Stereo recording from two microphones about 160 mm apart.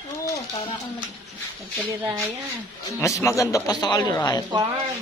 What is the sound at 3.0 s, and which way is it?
A man's voice, 20° left (ahead or behind).